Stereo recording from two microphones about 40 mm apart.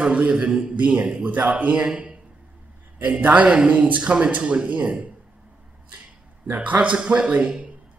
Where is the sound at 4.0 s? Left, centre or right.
Right.